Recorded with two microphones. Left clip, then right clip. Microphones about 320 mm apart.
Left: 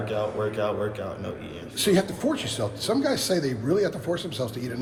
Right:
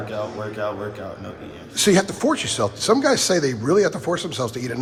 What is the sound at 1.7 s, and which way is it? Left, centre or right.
A man's voice, right.